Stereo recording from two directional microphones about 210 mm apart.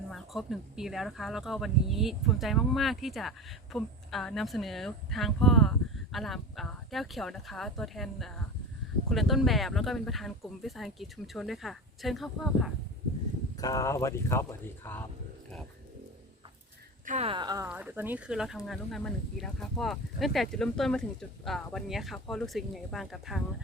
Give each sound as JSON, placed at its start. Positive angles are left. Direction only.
{"t": 0.1, "sound": "speech", "side_deg": 0}
{"t": 13.6, "sound": "speech", "side_deg": 15}
{"t": 17.1, "sound": "speech", "side_deg": -30}
{"t": 17.7, "sound": "speech", "side_deg": -10}